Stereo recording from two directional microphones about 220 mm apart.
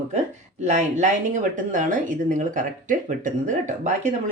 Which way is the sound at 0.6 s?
35° right (ahead or behind).